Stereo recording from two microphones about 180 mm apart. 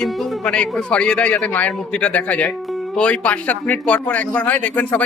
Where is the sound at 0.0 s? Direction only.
Centre (ahead or behind).